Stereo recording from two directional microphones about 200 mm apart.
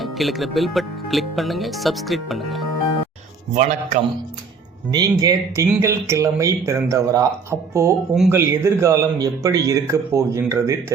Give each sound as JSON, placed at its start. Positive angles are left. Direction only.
{"t": 0.0, "sound": "speech", "side_deg": 0}
{"t": 3.5, "sound": "a man's voice", "side_deg": -35}
{"t": 4.9, "sound": "speech", "side_deg": -20}